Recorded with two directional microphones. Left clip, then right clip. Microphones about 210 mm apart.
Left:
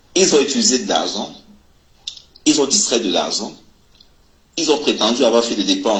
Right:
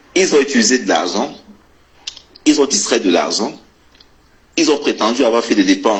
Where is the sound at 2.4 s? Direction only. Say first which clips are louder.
Right 2 dB; 55° right (ahead or behind).